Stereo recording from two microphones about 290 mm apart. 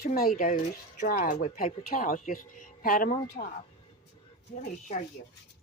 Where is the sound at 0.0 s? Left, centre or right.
Left.